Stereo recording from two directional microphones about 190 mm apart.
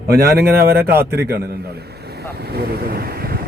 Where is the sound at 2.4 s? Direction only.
55° right (ahead or behind).